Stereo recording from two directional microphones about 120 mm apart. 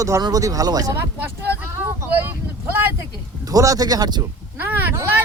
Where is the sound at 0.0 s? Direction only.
30° right (ahead or behind).